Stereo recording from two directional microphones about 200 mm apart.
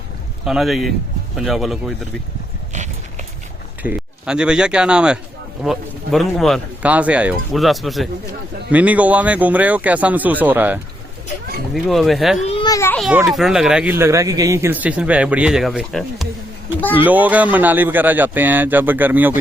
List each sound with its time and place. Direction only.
0.4 s speech: centre (ahead or behind)
3.8 s speech: 5° right (ahead or behind)
12.5 s a child's voice: 25° left (ahead or behind)
13.0 s speech: 5° right (ahead or behind)